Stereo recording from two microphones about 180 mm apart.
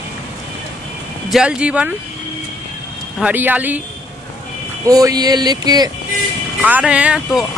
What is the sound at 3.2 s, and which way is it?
Speech, 10° right (ahead or behind).